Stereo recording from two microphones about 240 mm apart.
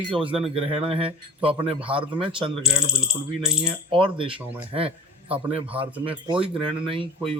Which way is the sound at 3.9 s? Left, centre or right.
Right.